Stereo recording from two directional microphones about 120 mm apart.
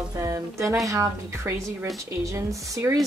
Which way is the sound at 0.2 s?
25° right (ahead or behind).